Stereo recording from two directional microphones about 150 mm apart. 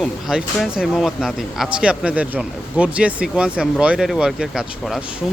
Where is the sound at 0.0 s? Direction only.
5° right (ahead or behind).